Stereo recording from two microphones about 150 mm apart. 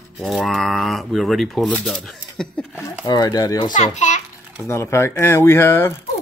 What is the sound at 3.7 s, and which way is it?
Speech, 50° left (ahead or behind).